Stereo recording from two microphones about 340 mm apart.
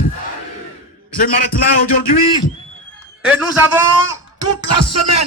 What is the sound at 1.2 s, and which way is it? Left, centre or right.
Speech, left.